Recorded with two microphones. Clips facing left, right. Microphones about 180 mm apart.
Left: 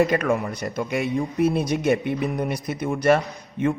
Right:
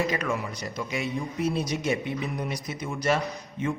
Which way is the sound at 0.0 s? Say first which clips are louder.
Left 7 dB; 55° left (ahead or behind).